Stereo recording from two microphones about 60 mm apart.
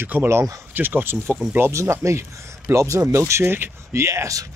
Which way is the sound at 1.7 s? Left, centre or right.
Right.